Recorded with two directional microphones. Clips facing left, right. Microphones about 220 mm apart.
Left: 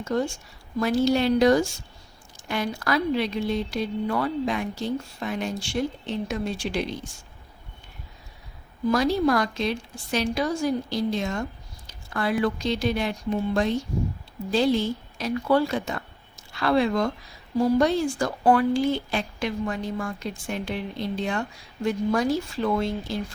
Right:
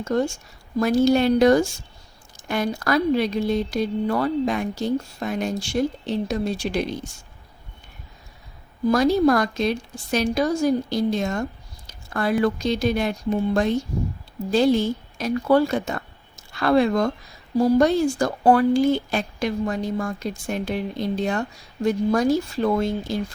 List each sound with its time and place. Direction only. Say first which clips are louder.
0.8 s speech: right 4 dB; 45° right (ahead or behind)
8.9 s speech: right 4 dB; 45° right (ahead or behind)